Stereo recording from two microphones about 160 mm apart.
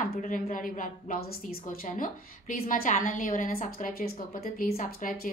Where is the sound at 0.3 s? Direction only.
55° left (ahead or behind).